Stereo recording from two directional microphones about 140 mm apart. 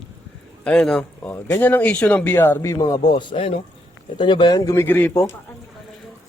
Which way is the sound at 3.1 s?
35° left (ahead or behind).